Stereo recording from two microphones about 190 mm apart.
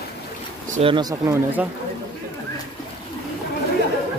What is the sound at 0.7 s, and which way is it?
Speech, 25° right (ahead or behind).